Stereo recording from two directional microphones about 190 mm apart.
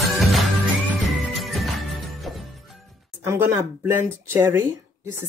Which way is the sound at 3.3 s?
10° right (ahead or behind).